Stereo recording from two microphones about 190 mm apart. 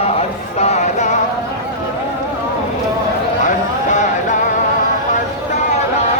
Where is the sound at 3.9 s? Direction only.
40° left (ahead or behind).